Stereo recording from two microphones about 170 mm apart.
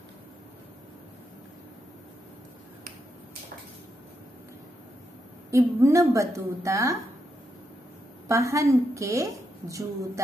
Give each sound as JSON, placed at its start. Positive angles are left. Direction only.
{"t": 5.5, "sound": "a woman's voice", "side_deg": -15}
{"t": 8.3, "sound": "a woman's voice", "side_deg": -20}